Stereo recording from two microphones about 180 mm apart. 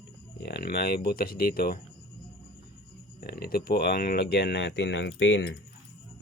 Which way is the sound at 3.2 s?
60° left (ahead or behind).